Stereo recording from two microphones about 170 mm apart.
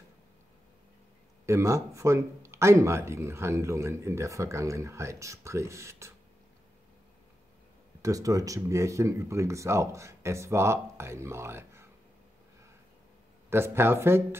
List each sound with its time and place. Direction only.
1.4 s speech: 15° right (ahead or behind)
8.0 s speech: 20° right (ahead or behind)
13.5 s speech: 15° right (ahead or behind)